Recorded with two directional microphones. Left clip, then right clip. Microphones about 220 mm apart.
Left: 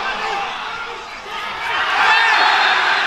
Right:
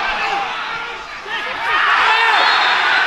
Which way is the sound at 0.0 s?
Centre (ahead or behind).